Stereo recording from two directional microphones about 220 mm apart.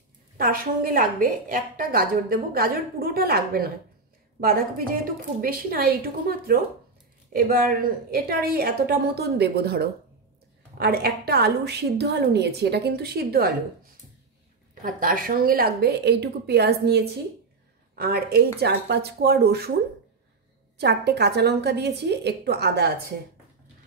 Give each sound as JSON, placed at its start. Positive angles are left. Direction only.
{"t": 0.4, "sound": "a woman's voice", "side_deg": -40}
{"t": 7.3, "sound": "a woman's voice", "side_deg": -40}
{"t": 14.8, "sound": "a woman's voice", "side_deg": -40}
{"t": 20.8, "sound": "a woman's voice", "side_deg": -45}